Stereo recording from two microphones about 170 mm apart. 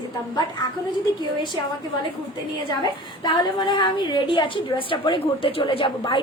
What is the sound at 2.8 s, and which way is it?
A woman's voice, 25° left (ahead or behind).